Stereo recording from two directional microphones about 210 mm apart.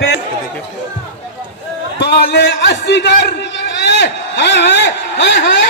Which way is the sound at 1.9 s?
55° left (ahead or behind).